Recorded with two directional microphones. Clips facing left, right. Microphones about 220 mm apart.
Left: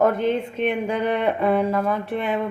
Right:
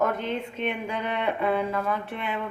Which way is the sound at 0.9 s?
40° left (ahead or behind).